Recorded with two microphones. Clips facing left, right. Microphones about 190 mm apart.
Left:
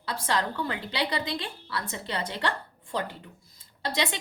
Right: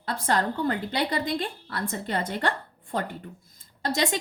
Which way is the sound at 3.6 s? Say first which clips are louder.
Right 3 dB; 45° right (ahead or behind).